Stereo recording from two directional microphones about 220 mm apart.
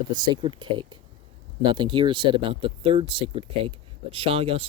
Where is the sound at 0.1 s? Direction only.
20° right (ahead or behind).